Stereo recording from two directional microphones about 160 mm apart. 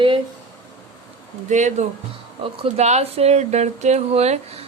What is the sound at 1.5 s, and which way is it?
Speech, 50° right (ahead or behind).